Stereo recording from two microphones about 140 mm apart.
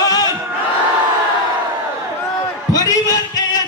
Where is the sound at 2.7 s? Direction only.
25° left (ahead or behind).